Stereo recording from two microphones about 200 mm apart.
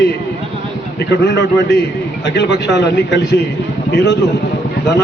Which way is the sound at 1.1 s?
60° left (ahead or behind).